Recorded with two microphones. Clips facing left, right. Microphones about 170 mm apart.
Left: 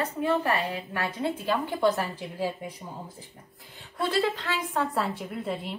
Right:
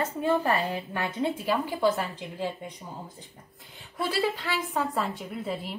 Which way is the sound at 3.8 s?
10° right (ahead or behind).